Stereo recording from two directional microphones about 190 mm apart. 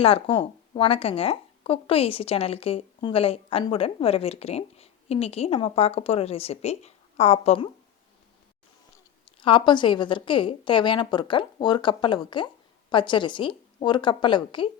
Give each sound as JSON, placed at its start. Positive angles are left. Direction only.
{"t": 0.0, "sound": "speech", "side_deg": 30}
{"t": 9.2, "sound": "a woman's voice", "side_deg": 25}